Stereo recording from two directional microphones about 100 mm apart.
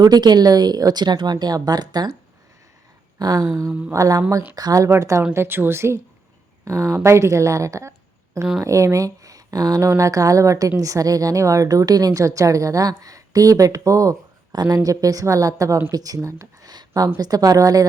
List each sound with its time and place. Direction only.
0.0 s speech: 45° right (ahead or behind)
3.2 s a woman's voice: 40° right (ahead or behind)
3.7 s mantra: 10° right (ahead or behind)
3.9 s a woman's voice: 35° right (ahead or behind)
16.7 s a sound: 40° right (ahead or behind)
17.2 s a woman's voice: 40° right (ahead or behind)